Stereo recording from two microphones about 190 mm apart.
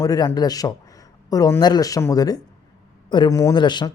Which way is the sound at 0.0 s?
20° left (ahead or behind).